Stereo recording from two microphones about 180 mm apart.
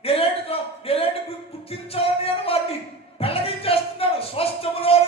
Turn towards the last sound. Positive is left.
turn(degrees=30)  # may be behind; listen again after turning